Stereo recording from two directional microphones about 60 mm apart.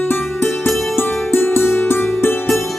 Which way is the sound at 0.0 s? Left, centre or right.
Left.